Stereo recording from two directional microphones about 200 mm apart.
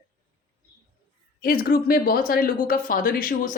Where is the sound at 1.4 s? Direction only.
45° left (ahead or behind).